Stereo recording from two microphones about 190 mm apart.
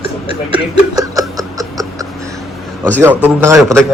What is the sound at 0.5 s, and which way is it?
Speech, 20° right (ahead or behind).